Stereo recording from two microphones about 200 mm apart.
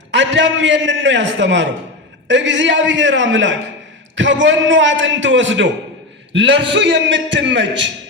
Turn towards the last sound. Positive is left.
turn(degrees=-65)  # may be behind; listen again after turning